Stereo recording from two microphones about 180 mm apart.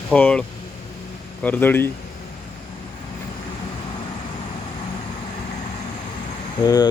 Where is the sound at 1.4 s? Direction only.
10° left (ahead or behind).